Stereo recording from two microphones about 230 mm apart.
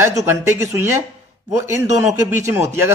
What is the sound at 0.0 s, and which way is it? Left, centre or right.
Speech, centre.